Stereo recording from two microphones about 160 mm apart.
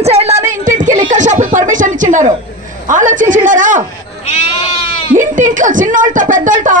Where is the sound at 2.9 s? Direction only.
55° right (ahead or behind).